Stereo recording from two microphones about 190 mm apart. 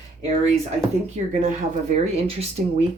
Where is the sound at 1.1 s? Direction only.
40° right (ahead or behind).